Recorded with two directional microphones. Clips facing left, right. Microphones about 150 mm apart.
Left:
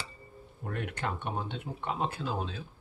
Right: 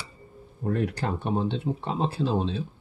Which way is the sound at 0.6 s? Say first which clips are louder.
Right 8 dB; 35° right (ahead or behind).